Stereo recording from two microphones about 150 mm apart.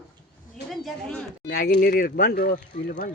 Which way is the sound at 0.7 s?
Centre (ahead or behind).